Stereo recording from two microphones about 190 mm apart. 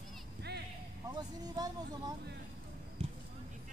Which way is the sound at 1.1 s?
20° right (ahead or behind).